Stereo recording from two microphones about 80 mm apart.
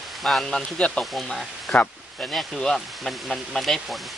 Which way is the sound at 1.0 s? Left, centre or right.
Centre.